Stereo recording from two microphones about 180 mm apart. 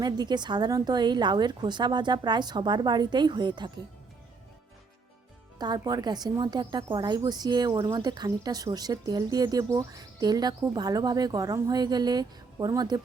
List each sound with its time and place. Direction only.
0.0 s speech: 25° right (ahead or behind)
5.5 s speech: 20° right (ahead or behind)